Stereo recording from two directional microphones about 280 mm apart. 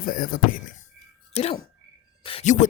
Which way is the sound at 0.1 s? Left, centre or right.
Left.